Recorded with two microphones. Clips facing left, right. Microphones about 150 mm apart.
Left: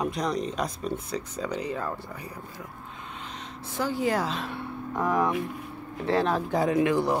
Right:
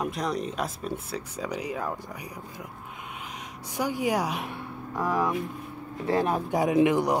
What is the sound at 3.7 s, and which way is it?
Speech, 15° right (ahead or behind).